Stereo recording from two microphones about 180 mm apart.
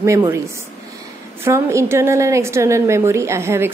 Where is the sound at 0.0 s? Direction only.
15° right (ahead or behind).